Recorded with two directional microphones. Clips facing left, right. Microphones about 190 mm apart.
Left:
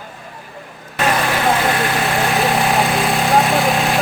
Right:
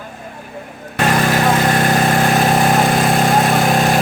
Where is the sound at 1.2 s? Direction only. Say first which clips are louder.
Right 4 dB; 45° right (ahead or behind).